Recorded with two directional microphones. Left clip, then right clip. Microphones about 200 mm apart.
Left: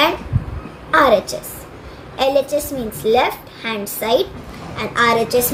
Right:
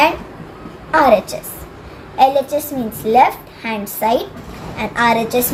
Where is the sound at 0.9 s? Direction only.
40° left (ahead or behind).